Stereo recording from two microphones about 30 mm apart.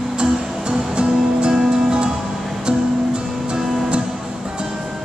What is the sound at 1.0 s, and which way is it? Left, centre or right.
Music, right.